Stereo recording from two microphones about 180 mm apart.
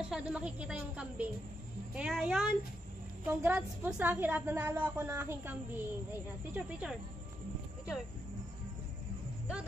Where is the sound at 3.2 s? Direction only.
10° right (ahead or behind).